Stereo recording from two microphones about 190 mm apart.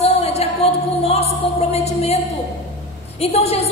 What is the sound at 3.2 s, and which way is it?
Speech, 35° left (ahead or behind).